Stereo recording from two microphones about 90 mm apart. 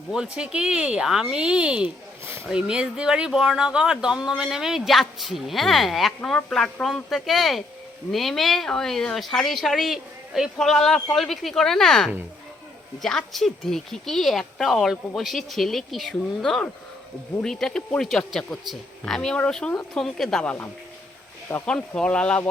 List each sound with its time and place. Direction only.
0.1 s speech: 10° right (ahead or behind)
2.2 s speech: 30° right (ahead or behind)
2.5 s speech: 10° right (ahead or behind); by 20.6 s 10° left (ahead or behind)
21.7 s speech: 10° left (ahead or behind)